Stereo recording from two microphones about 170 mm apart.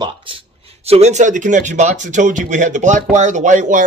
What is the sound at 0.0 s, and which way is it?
Speech, 30° right (ahead or behind).